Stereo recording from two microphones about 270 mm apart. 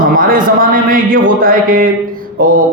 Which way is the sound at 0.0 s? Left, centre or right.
Right.